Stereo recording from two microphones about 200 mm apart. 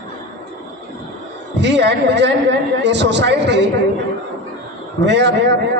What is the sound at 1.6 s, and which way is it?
Speech, 60° right (ahead or behind).